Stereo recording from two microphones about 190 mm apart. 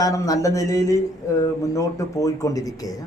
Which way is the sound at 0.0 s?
15° left (ahead or behind).